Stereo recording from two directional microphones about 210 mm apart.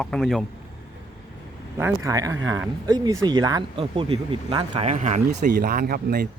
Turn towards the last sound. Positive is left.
turn(degrees=-45)  # may be behind; listen again after turning